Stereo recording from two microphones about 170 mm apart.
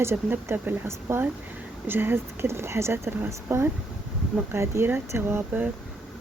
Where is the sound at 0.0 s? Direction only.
15° right (ahead or behind).